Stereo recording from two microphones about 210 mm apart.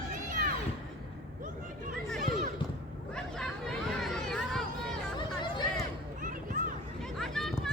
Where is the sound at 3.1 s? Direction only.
5° left (ahead or behind).